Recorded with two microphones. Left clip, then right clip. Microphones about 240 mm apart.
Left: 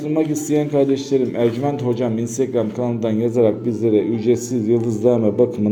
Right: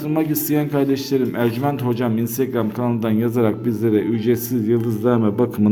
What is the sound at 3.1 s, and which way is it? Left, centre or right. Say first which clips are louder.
Speech: left 4 dB; right.